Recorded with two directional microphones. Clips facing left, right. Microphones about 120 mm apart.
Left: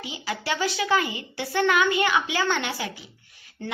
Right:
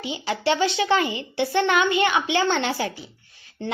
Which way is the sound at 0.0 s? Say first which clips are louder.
Right 7 dB; 25° right (ahead or behind).